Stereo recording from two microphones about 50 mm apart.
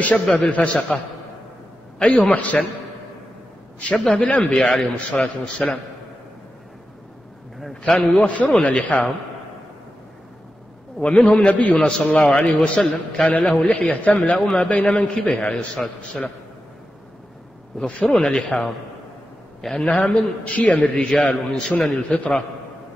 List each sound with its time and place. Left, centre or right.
0.0 s a man's voice: left
2.0 s a man's voice: centre
3.9 s a man's voice: centre
4.6 s a man's voice: centre
8.2 s a man's voice: left
11.1 s a man's voice: centre
11.6 s a man's voice: left
17.7 s a man's voice: left
18.0 s a man's voice: centre
19.7 s a man's voice: left